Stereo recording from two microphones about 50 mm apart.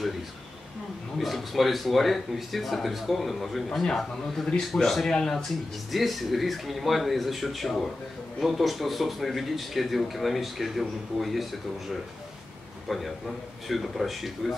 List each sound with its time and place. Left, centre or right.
1.1 s speech: centre
12.8 s a man's voice: centre